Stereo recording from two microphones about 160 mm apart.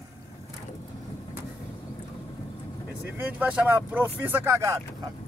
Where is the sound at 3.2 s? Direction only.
10° right (ahead or behind).